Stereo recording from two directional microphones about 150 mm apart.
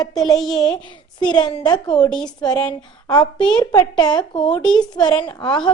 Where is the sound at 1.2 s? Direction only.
30° left (ahead or behind).